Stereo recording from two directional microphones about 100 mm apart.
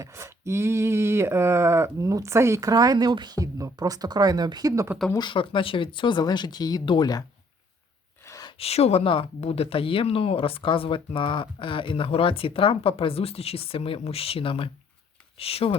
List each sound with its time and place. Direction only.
0.0 s a sound: 30° right (ahead or behind); by 4.7 s 45° right (ahead or behind)
5.1 s speech: 55° left (ahead or behind)
8.5 s speech: 90° left; by 15.8 s 75° left (ahead or behind)